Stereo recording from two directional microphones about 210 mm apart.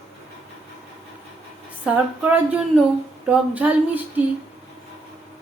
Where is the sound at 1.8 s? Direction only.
5° right (ahead or behind).